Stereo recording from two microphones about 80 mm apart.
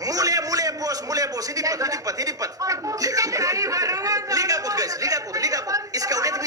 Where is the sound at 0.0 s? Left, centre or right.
Right.